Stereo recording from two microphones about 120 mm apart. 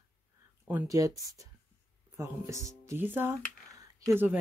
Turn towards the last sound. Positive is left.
turn(degrees=-15)  # may be behind; listen again after turning